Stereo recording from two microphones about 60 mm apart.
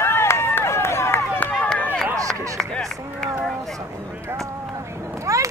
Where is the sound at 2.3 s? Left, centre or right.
Right.